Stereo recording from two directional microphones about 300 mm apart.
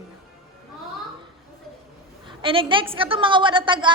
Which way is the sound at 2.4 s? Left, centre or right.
Centre.